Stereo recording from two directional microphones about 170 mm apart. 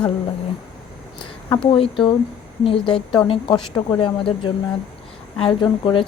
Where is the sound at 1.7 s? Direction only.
30° left (ahead or behind).